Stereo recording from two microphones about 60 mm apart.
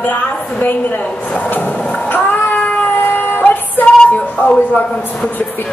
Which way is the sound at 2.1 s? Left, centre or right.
Left.